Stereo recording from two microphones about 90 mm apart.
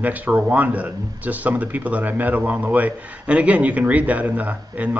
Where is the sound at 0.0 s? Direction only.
20° right (ahead or behind).